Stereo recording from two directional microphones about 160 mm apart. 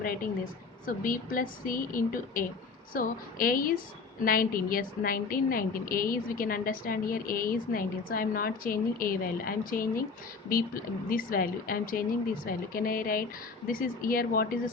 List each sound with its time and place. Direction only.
0.9 s a woman's voice: 60° left (ahead or behind)